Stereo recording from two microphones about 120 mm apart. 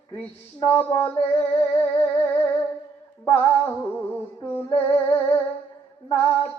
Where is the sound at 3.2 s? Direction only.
15° left (ahead or behind).